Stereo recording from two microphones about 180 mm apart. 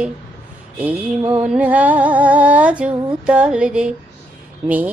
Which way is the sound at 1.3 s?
10° right (ahead or behind).